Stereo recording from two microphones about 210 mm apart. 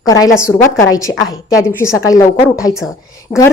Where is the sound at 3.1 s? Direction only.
15° left (ahead or behind).